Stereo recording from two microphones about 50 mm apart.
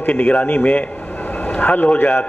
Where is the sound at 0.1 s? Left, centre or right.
Left.